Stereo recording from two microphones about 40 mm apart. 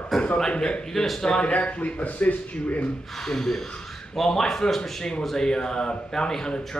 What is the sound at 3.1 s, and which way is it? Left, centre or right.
Speech, centre.